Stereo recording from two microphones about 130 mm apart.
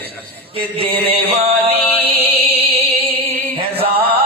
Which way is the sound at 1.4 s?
50° right (ahead or behind).